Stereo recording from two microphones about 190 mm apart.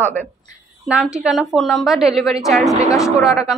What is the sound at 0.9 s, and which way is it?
A woman's voice, 5° right (ahead or behind).